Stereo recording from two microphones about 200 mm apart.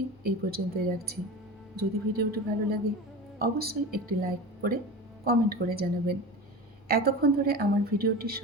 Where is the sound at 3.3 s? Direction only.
50° right (ahead or behind).